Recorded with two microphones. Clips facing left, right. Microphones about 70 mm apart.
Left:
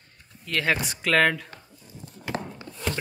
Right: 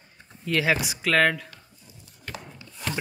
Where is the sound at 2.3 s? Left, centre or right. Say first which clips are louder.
Left 11 dB; left.